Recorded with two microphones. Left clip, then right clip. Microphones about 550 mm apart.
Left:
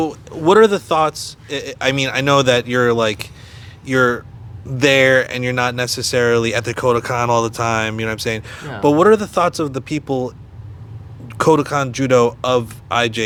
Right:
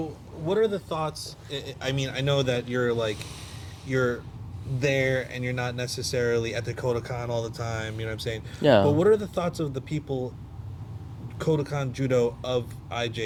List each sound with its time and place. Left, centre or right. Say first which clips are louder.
0.9 s speech: left 14 dB; left
1.5 s speech: left 13 dB; left
11.3 s speech: left 13 dB; left